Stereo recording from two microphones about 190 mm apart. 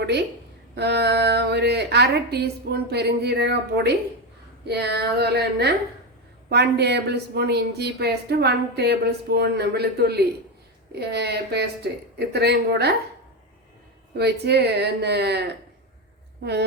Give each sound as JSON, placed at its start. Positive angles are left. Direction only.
{"t": 0.0, "sound": "a woman's voice", "side_deg": -60}
{"t": 14.2, "sound": "a woman's voice", "side_deg": -60}